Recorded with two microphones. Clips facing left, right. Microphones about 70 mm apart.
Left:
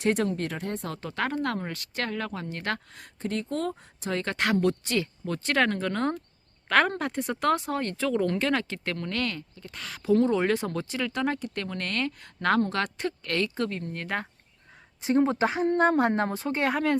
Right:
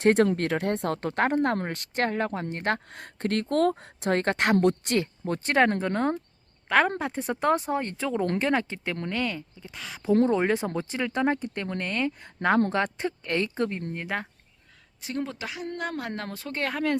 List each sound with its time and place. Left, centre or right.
0.0 s speech: right
0.3 s speech: right
2.9 s speech: right
4.3 s speech: right
6.7 s a woman's voice: centre
7.1 s speech: right
10.1 s speech: right
15.0 s speech: left; by 17.0 s centre